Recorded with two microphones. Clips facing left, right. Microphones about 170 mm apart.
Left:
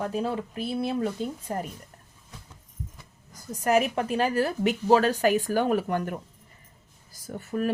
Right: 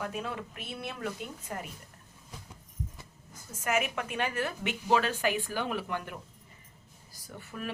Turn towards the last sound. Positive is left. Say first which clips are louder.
# left 12 dB
turn(degrees=45)  # may be behind; listen again after turning